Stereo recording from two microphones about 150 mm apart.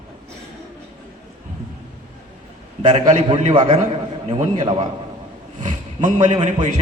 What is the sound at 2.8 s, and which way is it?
Speech, 50° right (ahead or behind).